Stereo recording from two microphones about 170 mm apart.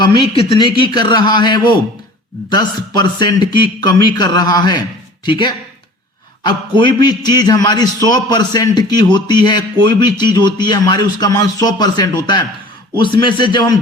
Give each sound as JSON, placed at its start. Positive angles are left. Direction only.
{"t": 0.0, "sound": "a man's voice", "side_deg": 25}